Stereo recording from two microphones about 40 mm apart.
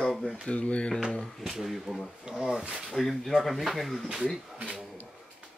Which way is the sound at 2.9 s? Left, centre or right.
Centre.